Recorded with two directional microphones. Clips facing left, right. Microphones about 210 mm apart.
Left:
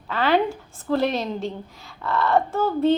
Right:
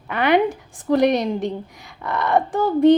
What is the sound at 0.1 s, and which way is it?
A woman's voice, 15° right (ahead or behind).